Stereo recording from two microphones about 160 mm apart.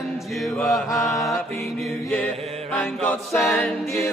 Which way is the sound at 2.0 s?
10° left (ahead or behind).